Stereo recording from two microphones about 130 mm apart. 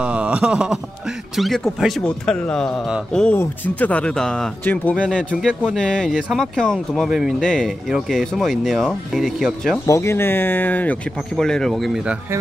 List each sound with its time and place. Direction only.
0.0 s a sound: 10° right (ahead or behind)
1.3 s speech: centre (ahead or behind)
4.9 s speech: 10° right (ahead or behind)
5.6 s speech: 5° left (ahead or behind)
9.8 s speech: 20° left (ahead or behind); by 12.2 s centre (ahead or behind)